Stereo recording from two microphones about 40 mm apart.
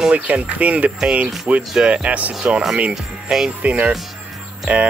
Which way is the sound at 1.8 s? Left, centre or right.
Right.